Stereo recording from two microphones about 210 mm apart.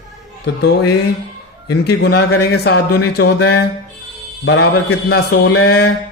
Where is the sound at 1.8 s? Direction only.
50° left (ahead or behind).